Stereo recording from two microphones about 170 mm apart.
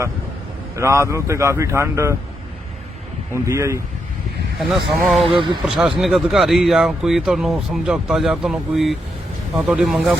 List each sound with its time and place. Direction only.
0.8 s speech: 15° right (ahead or behind)
3.3 s speech: 15° right (ahead or behind)
4.6 s speech: 5° right (ahead or behind)
5.2 s speech: 30° right (ahead or behind)
5.6 s speech: 5° right (ahead or behind)